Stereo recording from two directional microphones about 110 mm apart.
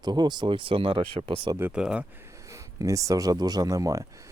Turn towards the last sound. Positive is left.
turn(degrees=-30)  # may be behind; listen again after turning